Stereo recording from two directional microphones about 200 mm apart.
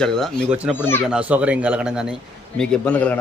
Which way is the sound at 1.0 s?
5° right (ahead or behind).